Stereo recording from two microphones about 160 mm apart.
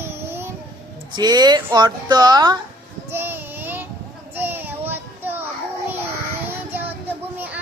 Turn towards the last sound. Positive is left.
turn(degrees=-10)  # may be behind; listen again after turning